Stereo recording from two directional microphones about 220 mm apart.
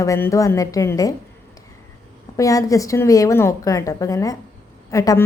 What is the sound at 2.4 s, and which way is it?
Speech, 15° left (ahead or behind).